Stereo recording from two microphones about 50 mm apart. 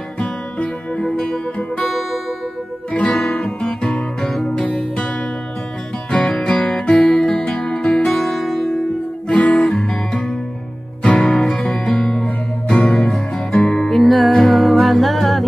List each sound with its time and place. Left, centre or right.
0.6 s music: left
2.9 s guitar: left
4.2 s music: centre
4.6 s music: left
6.0 s music: centre
7.8 s music: centre
9.3 s guitar: left
9.6 s guitar: centre
11.0 s music: left
11.2 s music: centre
12.6 s music: centre
13.9 s music: centre